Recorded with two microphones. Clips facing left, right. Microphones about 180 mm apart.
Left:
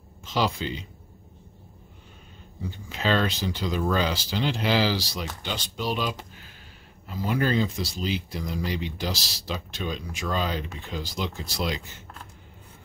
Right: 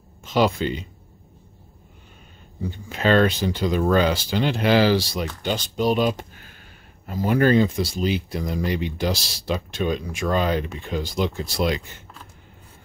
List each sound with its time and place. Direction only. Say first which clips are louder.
0.2 s speech: right 6 dB; 55° right (ahead or behind)
2.9 s speech: right 7 dB; 55° right (ahead or behind)